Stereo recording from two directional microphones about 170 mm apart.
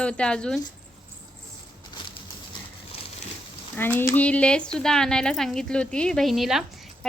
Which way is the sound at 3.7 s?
10° left (ahead or behind).